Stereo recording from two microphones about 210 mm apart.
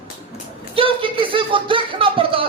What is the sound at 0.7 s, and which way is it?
A man's voice, 25° right (ahead or behind).